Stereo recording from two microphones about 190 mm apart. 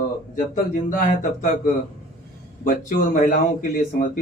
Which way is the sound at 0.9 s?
45° left (ahead or behind).